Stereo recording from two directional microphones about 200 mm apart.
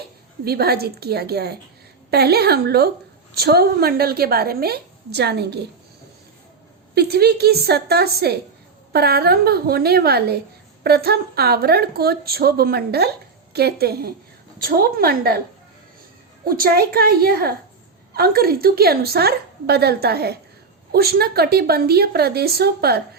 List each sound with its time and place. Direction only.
0.4 s a woman's voice: 50° right (ahead or behind)
6.9 s a woman's voice: 50° right (ahead or behind)
16.4 s a woman's voice: 45° right (ahead or behind)